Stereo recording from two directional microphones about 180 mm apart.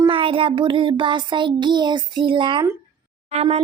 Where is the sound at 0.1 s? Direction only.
30° right (ahead or behind).